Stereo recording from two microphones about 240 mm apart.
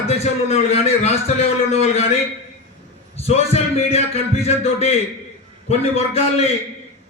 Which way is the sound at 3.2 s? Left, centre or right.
Left.